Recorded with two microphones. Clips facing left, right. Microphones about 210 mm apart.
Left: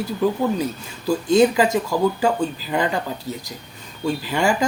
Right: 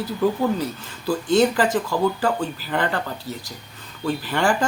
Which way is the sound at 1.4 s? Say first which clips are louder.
Left 2 dB; 10° left (ahead or behind).